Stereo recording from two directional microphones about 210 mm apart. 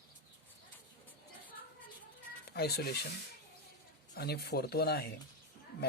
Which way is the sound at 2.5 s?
50° left (ahead or behind).